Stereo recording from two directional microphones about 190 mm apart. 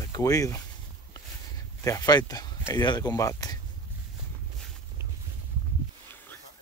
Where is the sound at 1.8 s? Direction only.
20° left (ahead or behind).